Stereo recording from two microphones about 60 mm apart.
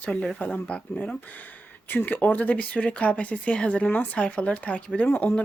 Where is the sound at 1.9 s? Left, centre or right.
Left.